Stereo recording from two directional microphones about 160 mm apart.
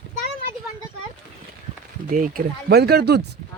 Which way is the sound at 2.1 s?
60° right (ahead or behind).